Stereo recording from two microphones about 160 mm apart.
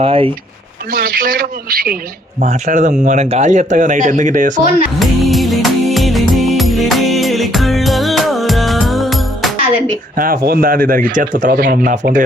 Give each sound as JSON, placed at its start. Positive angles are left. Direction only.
{"t": 0.0, "sound": "speech", "side_deg": -35}
{"t": 0.9, "sound": "speech", "side_deg": -65}
{"t": 2.4, "sound": "speech", "side_deg": -50}
{"t": 4.9, "sound": "music", "side_deg": 0}
{"t": 10.2, "sound": "speech", "side_deg": -60}
{"t": 11.6, "sound": "speech", "side_deg": -65}